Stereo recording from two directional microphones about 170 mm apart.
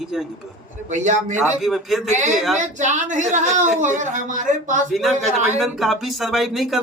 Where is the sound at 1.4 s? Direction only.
Centre (ahead or behind).